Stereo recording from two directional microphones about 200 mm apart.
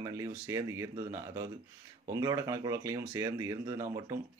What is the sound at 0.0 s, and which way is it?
Speech, 15° right (ahead or behind).